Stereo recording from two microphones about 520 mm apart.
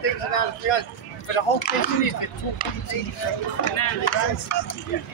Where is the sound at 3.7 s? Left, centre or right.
Left.